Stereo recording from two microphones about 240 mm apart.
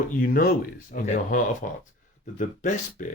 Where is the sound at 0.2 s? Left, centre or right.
Left.